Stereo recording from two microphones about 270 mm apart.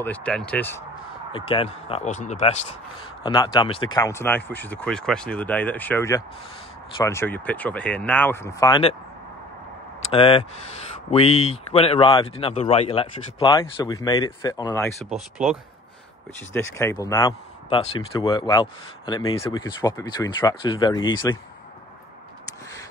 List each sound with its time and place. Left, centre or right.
0.0 s speech: centre
1.3 s speech: centre
3.3 s speech: centre
10.0 s speech: centre
16.3 s speech: centre